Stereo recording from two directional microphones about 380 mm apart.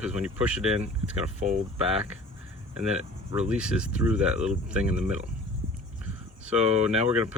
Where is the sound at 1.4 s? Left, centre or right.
Centre.